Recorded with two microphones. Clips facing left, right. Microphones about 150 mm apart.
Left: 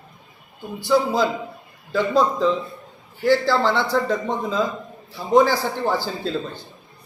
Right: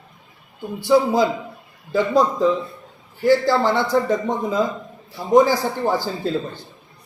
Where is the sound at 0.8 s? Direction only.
20° right (ahead or behind).